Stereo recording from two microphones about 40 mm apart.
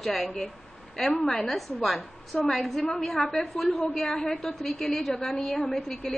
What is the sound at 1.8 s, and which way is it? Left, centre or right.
A woman's voice, centre.